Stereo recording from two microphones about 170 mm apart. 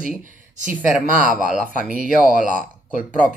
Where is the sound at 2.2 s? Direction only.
50° left (ahead or behind).